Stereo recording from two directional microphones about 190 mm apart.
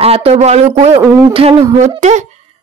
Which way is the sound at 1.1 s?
15° right (ahead or behind).